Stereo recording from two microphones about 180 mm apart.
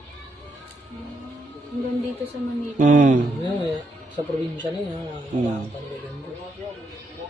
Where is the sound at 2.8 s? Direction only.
45° right (ahead or behind).